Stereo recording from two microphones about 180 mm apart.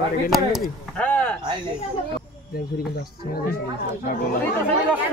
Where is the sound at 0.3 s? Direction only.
Centre (ahead or behind).